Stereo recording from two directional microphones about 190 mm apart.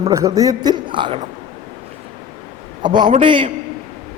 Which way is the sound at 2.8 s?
25° right (ahead or behind).